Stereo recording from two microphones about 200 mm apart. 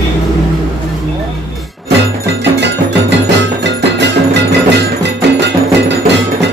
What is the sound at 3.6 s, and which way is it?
Music, 60° right (ahead or behind).